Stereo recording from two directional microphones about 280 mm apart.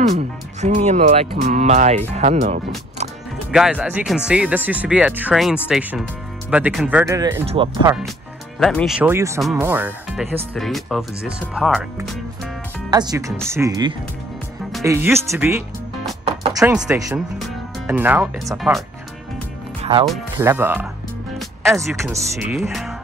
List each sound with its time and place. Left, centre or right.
0.1 s speech: right
3.5 s speech: centre
8.5 s speech: centre
12.9 s speech: centre
16.3 s music: centre
16.6 s speech: centre
19.8 s music: centre
20.1 s speech: centre
22.1 s speech: centre